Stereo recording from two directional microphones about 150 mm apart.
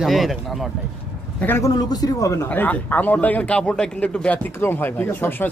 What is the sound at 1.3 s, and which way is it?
Speech, 15° left (ahead or behind).